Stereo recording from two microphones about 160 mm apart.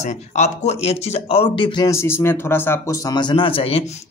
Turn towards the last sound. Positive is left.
turn(degrees=35)  # may be behind; listen again after turning